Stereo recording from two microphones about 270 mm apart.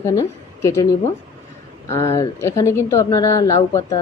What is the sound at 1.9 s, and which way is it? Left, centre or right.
A woman's voice, centre.